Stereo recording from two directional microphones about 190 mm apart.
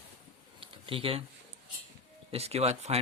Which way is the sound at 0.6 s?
30° right (ahead or behind).